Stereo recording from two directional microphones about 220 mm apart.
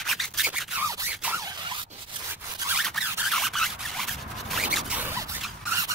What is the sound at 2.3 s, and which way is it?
Rub, centre (ahead or behind).